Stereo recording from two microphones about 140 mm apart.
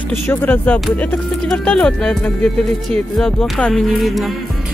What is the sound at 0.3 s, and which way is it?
Speech, 10° left (ahead or behind).